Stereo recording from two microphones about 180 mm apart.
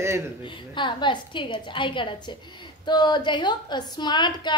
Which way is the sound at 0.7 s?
25° left (ahead or behind).